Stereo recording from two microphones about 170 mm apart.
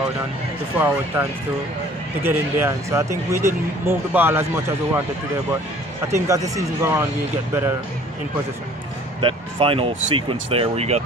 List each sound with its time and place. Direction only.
0.7 s speech: 10° right (ahead or behind)
2.2 s speech: 15° right (ahead or behind)
6.0 s speech: 15° right (ahead or behind)
9.2 s speech: 30° right (ahead or behind)